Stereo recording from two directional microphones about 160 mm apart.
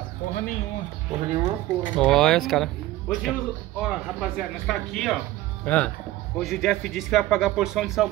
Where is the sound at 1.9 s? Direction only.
5° left (ahead or behind).